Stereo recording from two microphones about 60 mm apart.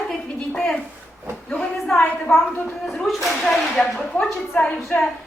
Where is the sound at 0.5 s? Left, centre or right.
Centre.